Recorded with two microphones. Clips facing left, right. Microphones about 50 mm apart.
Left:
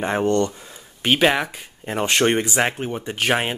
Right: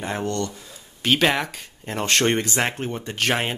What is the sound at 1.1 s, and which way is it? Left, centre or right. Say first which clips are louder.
Speech: left 2 dB; centre.